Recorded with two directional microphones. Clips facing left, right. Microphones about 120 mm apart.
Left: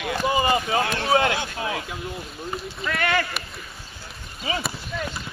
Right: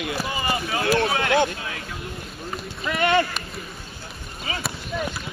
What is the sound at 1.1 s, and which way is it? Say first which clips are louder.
Speech: left 3 dB; 30° left (ahead or behind).